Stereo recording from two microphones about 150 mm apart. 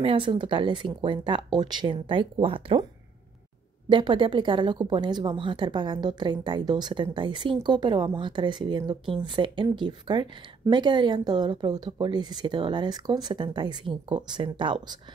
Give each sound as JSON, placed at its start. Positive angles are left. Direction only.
{"t": 0.0, "sound": "a woman's voice", "side_deg": -35}
{"t": 3.9, "sound": "a woman's voice", "side_deg": -35}